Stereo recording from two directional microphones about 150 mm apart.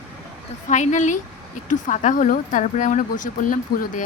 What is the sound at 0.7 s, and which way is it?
Speech, 55° left (ahead or behind).